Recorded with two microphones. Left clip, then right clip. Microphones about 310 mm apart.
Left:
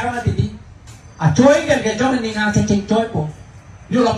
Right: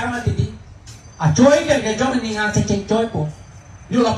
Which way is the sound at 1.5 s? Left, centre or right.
Right.